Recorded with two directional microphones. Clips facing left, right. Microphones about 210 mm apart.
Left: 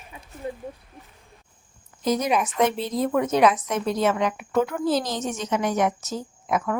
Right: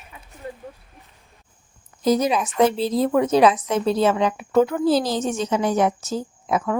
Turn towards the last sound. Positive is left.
turn(degrees=-30)  # may be behind; listen again after turning